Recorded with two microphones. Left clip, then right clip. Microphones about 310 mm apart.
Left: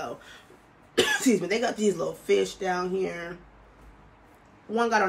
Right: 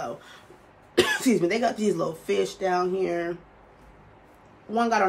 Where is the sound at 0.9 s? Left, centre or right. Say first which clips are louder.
Right 1 dB; centre.